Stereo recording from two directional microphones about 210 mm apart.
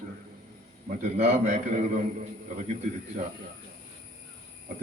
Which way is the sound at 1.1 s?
30° right (ahead or behind).